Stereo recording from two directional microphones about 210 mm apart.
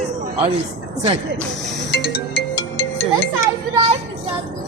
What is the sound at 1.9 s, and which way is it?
Music, 50° left (ahead or behind).